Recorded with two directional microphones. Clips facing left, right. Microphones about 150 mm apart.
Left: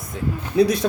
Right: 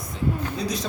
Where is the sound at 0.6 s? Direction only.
60° left (ahead or behind).